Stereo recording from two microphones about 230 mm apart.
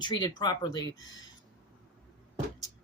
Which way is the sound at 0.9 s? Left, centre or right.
Left.